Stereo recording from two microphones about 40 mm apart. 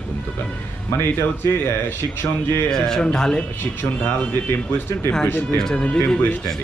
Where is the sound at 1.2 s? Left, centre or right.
Left.